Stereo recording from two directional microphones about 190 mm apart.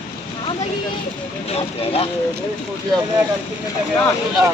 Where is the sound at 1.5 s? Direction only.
30° left (ahead or behind).